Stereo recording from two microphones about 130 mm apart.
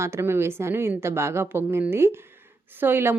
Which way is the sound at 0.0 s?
20° right (ahead or behind).